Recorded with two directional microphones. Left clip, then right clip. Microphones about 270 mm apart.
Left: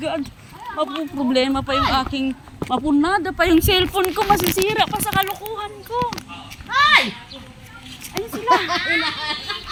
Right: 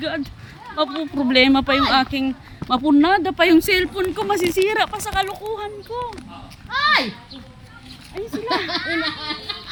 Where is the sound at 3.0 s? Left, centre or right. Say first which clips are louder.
Right 2 dB; right.